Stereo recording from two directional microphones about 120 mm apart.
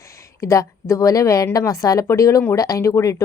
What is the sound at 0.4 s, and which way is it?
Speech, 25° left (ahead or behind).